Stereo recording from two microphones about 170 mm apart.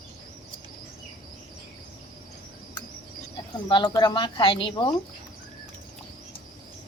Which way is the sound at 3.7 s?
30° left (ahead or behind).